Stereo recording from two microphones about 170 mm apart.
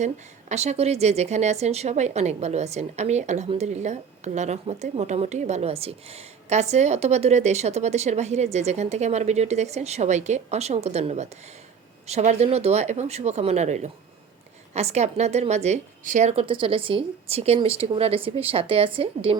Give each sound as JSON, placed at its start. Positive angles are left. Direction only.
{"t": 0.0, "sound": "speech", "side_deg": -40}